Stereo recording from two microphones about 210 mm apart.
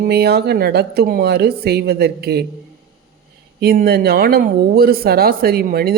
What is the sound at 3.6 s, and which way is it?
Speech, 50° right (ahead or behind).